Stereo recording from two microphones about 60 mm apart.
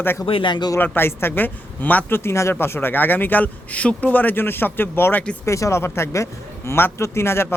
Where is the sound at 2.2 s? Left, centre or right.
Left.